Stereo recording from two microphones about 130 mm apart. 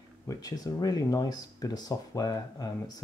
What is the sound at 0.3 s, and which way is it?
Speech, 25° left (ahead or behind).